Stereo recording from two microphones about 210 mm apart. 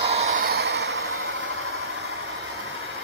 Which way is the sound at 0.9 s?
75° right (ahead or behind).